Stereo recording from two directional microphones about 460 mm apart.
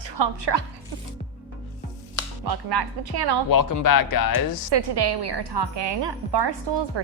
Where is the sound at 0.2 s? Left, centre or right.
Right.